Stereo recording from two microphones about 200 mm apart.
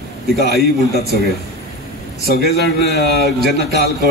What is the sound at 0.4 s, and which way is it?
Speech, 50° right (ahead or behind).